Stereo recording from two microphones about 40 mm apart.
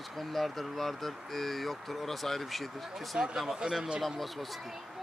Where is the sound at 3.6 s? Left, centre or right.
Centre.